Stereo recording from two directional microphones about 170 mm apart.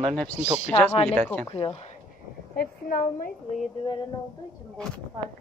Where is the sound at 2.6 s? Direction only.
55° left (ahead or behind).